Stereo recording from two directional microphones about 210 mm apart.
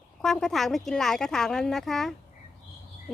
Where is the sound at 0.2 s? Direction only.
Centre (ahead or behind).